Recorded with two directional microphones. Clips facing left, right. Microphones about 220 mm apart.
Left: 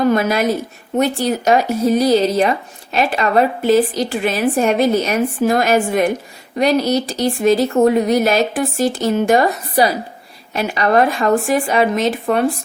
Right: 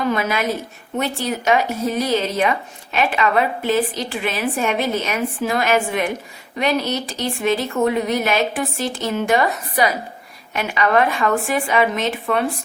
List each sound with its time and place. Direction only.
0.1 s speech: 40° left (ahead or behind)